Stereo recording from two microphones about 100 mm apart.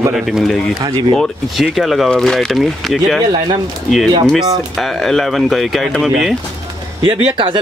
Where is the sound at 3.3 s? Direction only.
55° right (ahead or behind).